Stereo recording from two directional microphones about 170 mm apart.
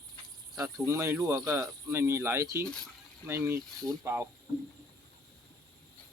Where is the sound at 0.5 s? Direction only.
15° right (ahead or behind).